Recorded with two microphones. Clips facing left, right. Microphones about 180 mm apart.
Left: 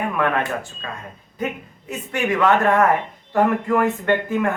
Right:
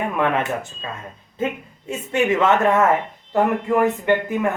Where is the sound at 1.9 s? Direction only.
25° right (ahead or behind).